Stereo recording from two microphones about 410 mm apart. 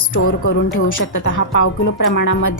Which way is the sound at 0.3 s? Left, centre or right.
Left.